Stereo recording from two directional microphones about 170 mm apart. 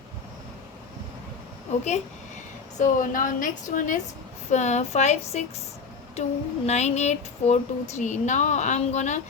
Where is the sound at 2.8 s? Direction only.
50° left (ahead or behind).